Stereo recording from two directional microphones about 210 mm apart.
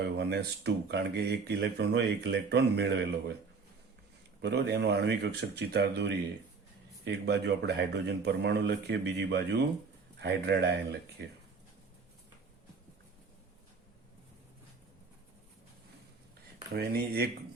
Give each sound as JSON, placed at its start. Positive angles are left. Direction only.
{"t": 0.0, "sound": "speech", "side_deg": -50}
{"t": 4.4, "sound": "speech", "side_deg": -50}
{"t": 16.7, "sound": "speech", "side_deg": -50}